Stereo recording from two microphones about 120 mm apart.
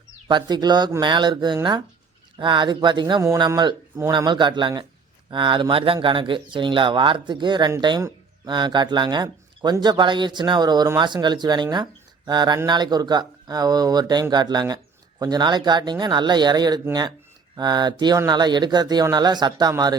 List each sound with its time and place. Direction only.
0.3 s a man's voice: 40° right (ahead or behind)